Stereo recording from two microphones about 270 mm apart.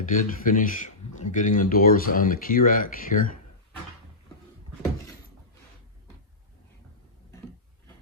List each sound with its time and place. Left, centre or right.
0.0 s speech: left